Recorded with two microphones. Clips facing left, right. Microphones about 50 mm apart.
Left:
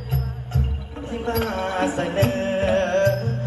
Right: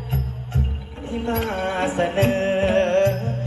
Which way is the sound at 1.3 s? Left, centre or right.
Right.